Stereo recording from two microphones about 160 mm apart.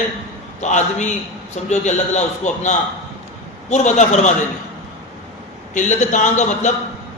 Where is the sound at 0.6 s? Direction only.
50° left (ahead or behind).